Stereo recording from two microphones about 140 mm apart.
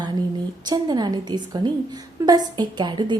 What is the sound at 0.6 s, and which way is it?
A woman's voice, 30° right (ahead or behind).